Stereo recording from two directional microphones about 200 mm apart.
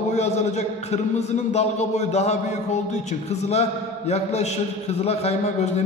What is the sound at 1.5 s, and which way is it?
A man's voice, 35° left (ahead or behind).